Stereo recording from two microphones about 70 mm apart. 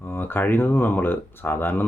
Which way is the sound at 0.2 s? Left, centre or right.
Left.